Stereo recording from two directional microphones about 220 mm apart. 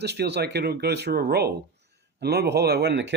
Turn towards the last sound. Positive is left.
turn(degrees=-50)  # may be behind; listen again after turning